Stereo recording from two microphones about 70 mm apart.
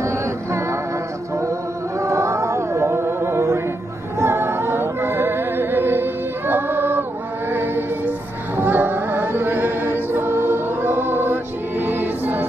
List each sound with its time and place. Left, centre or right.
0.0 s music: right
2.0 s music: right
8.5 s choir: right